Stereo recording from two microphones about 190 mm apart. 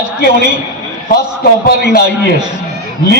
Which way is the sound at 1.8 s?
60° left (ahead or behind).